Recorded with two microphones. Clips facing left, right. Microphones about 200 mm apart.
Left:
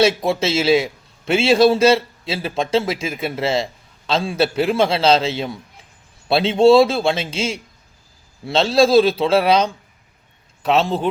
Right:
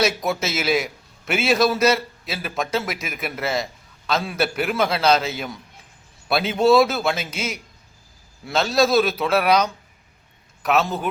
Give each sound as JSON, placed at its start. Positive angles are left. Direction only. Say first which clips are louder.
{"t": 0.0, "sound": "a man's voice", "louder": "left 5 dB", "side_deg": 30}